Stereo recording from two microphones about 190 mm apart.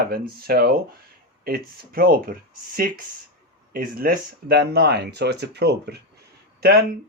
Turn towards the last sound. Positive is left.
turn(degrees=-55)  # may be behind; listen again after turning